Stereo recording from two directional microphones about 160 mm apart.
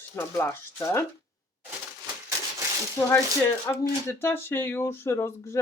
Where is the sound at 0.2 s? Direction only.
15° left (ahead or behind).